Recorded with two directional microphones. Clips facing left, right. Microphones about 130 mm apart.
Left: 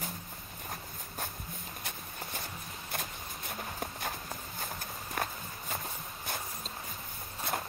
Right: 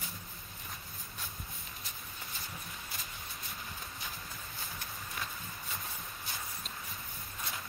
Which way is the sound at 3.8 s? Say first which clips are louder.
Left 7 dB; 55° left (ahead or behind).